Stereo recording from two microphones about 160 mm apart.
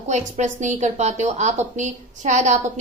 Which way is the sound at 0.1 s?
50° right (ahead or behind).